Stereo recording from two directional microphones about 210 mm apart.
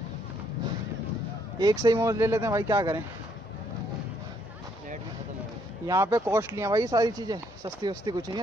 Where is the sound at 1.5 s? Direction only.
20° right (ahead or behind).